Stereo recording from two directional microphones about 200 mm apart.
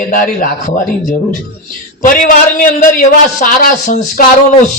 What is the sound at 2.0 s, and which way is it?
A man's voice, 40° left (ahead or behind).